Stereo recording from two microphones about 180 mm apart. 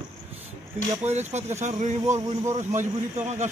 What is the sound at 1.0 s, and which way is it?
Speech, 40° right (ahead or behind).